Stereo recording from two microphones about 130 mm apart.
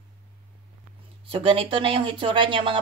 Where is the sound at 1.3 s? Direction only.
45° right (ahead or behind).